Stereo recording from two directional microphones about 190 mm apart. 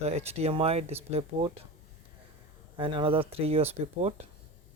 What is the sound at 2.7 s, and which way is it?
Speech, 25° right (ahead or behind).